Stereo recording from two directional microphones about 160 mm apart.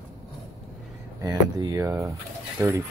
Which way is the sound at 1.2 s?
20° right (ahead or behind).